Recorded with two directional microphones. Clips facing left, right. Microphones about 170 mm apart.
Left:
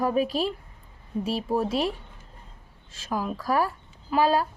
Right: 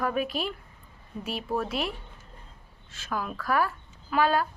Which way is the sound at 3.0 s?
30° left (ahead or behind).